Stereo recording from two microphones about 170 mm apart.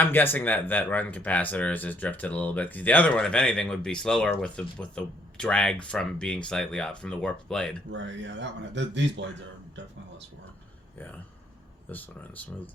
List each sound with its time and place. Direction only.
0.0 s speech: 10° left (ahead or behind)
7.9 s speech: 90° right
11.9 s speech: 10° left (ahead or behind)